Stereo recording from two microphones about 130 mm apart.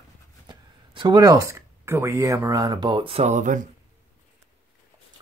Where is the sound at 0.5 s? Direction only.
35° right (ahead or behind).